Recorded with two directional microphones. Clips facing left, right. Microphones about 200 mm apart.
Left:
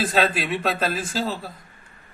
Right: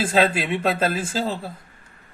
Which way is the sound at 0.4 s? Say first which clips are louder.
Right 2 dB; 25° right (ahead or behind).